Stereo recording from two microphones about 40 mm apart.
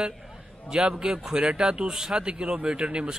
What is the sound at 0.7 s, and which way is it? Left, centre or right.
Speech, right.